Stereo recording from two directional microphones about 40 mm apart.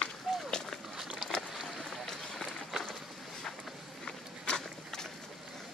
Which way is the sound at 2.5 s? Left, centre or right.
Centre.